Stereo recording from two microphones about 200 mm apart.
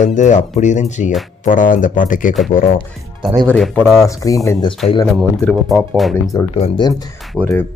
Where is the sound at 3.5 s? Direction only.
5° left (ahead or behind).